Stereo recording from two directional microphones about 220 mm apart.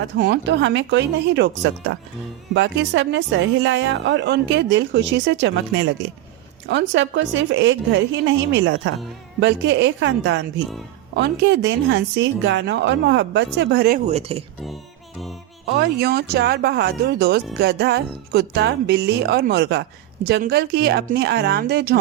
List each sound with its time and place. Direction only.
0.2 s a woman's voice: 50° right (ahead or behind)
14.1 s speech: 25° right (ahead or behind)
15.6 s speech: 45° right (ahead or behind)